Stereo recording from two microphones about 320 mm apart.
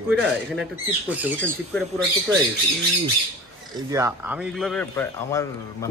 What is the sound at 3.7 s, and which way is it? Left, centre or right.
Speech, centre.